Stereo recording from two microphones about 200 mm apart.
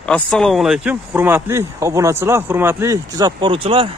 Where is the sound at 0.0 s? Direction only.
5° left (ahead or behind).